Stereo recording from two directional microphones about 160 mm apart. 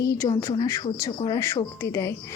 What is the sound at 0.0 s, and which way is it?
Speech, 20° left (ahead or behind).